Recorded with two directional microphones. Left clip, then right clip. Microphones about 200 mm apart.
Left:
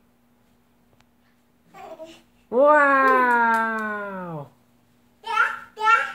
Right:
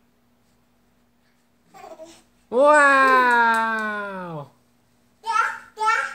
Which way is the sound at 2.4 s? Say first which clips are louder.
Right 1 dB; 15° right (ahead or behind).